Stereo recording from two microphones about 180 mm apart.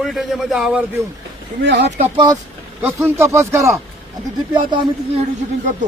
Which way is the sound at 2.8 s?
15° right (ahead or behind).